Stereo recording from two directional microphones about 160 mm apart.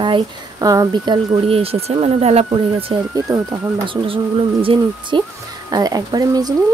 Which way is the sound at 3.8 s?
35° right (ahead or behind).